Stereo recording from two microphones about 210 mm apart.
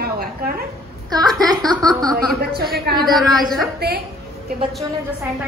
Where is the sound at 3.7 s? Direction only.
50° right (ahead or behind).